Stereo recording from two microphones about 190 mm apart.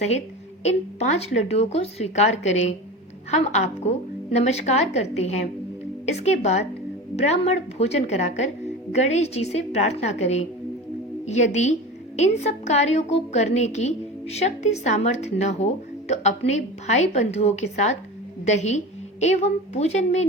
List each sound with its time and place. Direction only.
0.6 s a woman's voice: 35° left (ahead or behind)